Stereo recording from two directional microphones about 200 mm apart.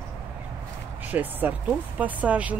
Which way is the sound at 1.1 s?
10° right (ahead or behind).